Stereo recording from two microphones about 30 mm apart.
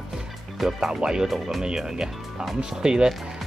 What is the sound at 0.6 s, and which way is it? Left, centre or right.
Speech, centre.